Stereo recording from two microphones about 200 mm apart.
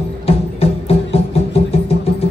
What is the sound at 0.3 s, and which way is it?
Music, 30° left (ahead or behind).